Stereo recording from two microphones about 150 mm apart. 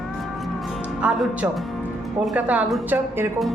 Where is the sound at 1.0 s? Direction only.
5° right (ahead or behind).